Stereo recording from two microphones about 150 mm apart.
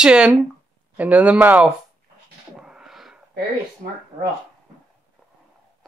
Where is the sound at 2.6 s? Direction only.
5° right (ahead or behind).